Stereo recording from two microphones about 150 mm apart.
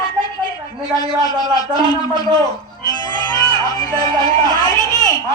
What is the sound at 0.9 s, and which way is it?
A man's voice, 25° left (ahead or behind).